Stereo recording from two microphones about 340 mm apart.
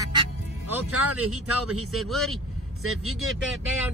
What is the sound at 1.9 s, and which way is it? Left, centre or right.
Speech, centre.